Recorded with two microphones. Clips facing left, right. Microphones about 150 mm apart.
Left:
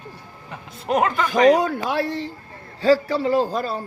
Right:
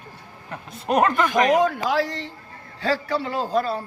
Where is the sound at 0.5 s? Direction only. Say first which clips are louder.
Even; centre (ahead or behind).